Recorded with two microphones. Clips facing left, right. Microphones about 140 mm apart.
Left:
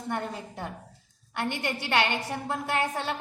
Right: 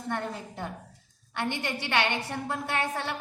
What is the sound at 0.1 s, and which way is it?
A woman's voice, 10° left (ahead or behind).